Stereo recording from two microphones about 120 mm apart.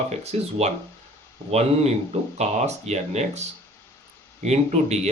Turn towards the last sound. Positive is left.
turn(degrees=-65)  # may be behind; listen again after turning